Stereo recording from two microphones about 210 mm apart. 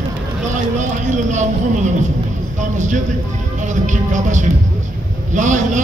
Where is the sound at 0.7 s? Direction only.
35° right (ahead or behind).